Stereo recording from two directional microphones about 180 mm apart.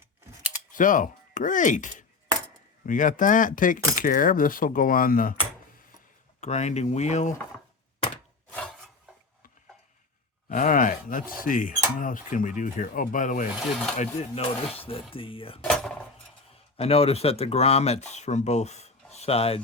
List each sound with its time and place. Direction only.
0.7 s speech: 45° left (ahead or behind)
6.4 s speech: 40° left (ahead or behind)
10.5 s speech: 45° left (ahead or behind); by 15.6 s 30° left (ahead or behind)
15.6 s cutlery: centre (ahead or behind)
16.7 s speech: 35° left (ahead or behind)